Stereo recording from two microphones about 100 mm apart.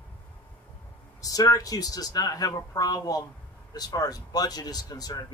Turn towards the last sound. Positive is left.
turn(degrees=40)  # may be behind; listen again after turning